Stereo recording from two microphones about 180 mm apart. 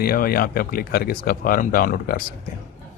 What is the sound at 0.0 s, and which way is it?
Speech, 55° left (ahead or behind).